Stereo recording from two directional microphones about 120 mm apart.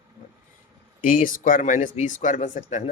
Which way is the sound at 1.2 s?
90° left.